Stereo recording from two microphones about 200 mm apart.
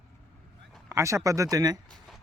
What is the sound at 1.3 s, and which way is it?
Speech, 15° right (ahead or behind).